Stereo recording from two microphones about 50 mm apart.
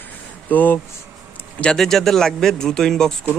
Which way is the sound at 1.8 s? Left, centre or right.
Centre.